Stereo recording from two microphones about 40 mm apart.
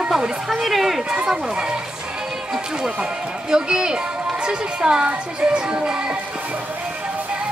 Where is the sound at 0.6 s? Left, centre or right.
Centre.